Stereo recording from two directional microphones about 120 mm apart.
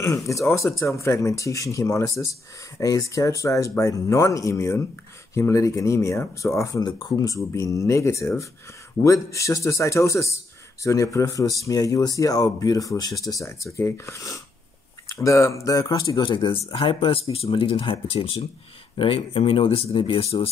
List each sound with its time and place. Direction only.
0.0 s speech: 25° left (ahead or behind)
16.2 s speech: 40° left (ahead or behind)